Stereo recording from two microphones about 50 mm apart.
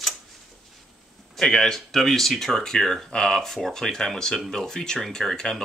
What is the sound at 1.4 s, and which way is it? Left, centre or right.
Speech, centre.